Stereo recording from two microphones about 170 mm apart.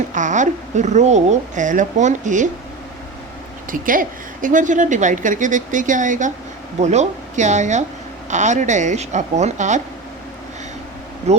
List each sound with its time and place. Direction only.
0.1 s a woman's voice: 45° right (ahead or behind)
3.7 s a woman's voice: 55° right (ahead or behind)
11.3 s speech: 40° right (ahead or behind)